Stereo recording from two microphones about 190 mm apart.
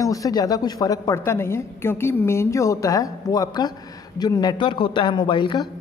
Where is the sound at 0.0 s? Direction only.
15° left (ahead or behind).